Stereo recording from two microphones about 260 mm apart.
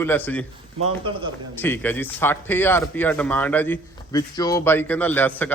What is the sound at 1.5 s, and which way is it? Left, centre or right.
A man's voice, centre.